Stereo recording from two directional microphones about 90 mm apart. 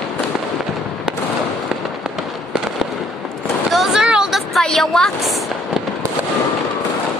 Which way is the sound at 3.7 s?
5° right (ahead or behind).